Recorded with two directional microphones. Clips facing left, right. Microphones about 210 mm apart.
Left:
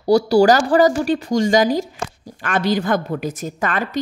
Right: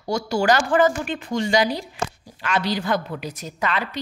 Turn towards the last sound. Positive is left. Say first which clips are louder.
# left 3 dB
turn(degrees=50)  # may be behind; listen again after turning